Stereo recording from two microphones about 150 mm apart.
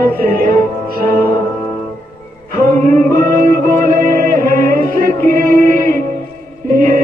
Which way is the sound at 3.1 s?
70° right (ahead or behind).